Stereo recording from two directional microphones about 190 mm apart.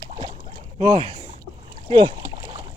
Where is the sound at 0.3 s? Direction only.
35° right (ahead or behind).